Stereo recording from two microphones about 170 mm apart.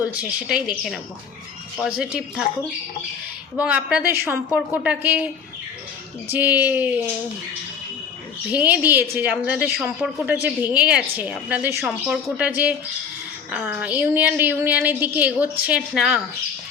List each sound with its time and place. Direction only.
0.0 s a woman's voice: 5° right (ahead or behind)
3.6 s a woman's voice: 5° right (ahead or behind)
8.5 s a woman's voice: 10° right (ahead or behind)